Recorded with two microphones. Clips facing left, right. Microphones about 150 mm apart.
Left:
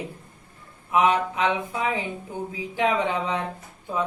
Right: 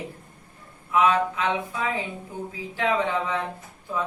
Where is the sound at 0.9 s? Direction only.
20° left (ahead or behind).